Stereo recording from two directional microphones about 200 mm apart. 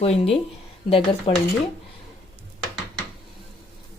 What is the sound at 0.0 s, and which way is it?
A woman's voice, 30° left (ahead or behind).